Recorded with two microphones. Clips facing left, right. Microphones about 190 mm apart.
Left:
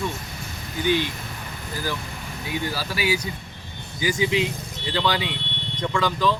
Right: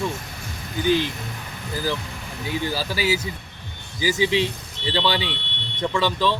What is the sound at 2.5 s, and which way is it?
Speech, 30° right (ahead or behind).